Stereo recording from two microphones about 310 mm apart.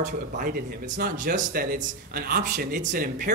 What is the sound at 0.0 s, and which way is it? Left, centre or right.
Speech, right.